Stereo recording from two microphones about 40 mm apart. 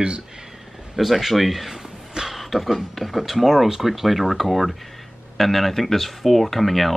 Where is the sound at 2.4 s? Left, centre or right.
Centre.